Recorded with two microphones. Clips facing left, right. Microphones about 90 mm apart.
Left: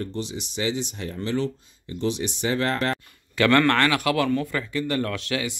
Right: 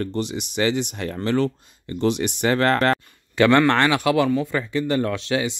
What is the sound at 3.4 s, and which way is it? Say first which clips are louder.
A man's voice: right 3 dB; 20° right (ahead or behind).